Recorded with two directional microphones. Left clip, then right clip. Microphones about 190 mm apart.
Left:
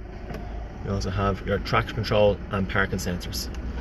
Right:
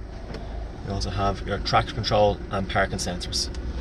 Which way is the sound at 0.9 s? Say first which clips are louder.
Even; 20° left (ahead or behind).